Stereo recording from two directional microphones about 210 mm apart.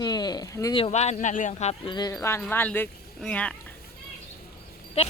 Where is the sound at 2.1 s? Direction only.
10° left (ahead or behind).